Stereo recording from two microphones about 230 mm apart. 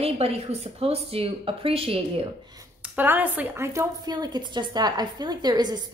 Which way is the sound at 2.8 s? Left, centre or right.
Centre.